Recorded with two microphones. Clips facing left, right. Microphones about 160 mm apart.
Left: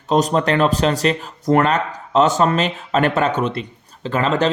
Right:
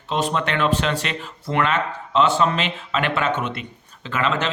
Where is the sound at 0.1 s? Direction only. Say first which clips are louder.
Left 6 dB; 40° left (ahead or behind).